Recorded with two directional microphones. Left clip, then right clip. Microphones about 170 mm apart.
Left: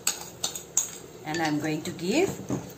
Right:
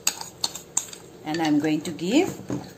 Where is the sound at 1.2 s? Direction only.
75° right (ahead or behind).